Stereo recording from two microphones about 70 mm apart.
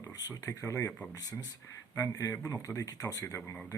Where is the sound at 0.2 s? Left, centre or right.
Left.